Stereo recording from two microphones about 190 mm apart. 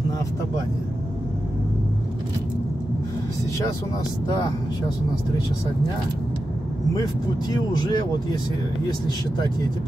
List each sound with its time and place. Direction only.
7.0 s speech: 20° left (ahead or behind)